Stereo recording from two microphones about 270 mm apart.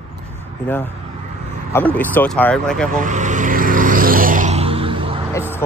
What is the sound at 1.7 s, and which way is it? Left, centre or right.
Speech, centre.